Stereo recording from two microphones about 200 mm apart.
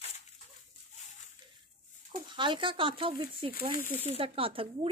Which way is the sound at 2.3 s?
25° right (ahead or behind).